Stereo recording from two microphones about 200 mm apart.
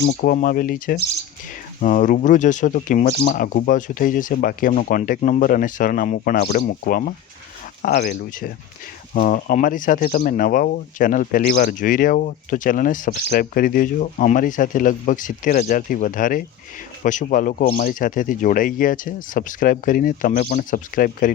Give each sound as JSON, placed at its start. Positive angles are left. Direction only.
{"t": 0.0, "sound": "speech", "side_deg": 50}